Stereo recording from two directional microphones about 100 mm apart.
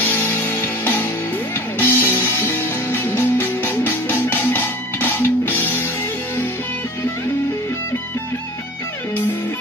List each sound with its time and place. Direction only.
0.0 s music: 20° left (ahead or behind)